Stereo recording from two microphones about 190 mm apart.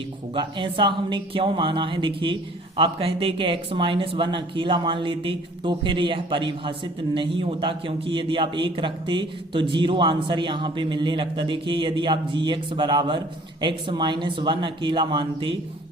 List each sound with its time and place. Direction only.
0.3 s speech: 25° right (ahead or behind)